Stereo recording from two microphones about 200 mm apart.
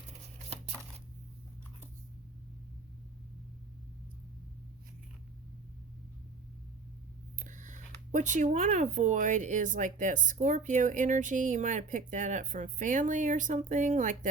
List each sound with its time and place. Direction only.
7.3 s speech: 40° right (ahead or behind)